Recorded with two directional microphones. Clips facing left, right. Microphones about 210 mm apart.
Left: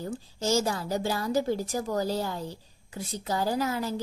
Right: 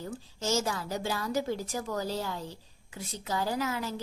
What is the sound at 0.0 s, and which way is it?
A woman's voice, 35° left (ahead or behind).